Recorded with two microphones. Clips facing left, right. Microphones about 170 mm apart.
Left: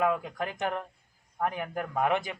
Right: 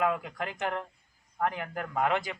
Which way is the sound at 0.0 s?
20° left (ahead or behind).